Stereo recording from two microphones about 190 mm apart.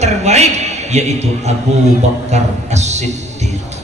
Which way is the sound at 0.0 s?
35° right (ahead or behind).